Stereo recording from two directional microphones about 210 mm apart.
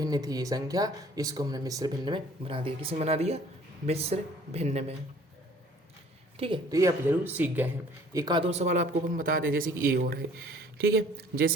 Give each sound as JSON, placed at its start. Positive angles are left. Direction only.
{"t": 0.0, "sound": "speech", "side_deg": -20}
{"t": 6.4, "sound": "speech", "side_deg": -20}
{"t": 8.1, "sound": "speech", "side_deg": -20}